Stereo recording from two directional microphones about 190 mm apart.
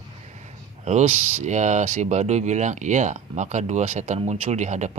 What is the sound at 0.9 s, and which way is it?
Speech, 35° right (ahead or behind).